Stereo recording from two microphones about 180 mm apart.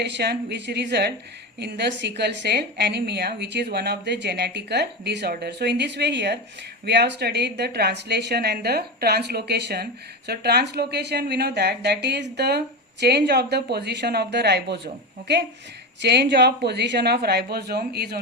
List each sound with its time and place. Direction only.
0.0 s a woman's voice: 65° right (ahead or behind)
16.0 s a woman's voice: 70° right (ahead or behind)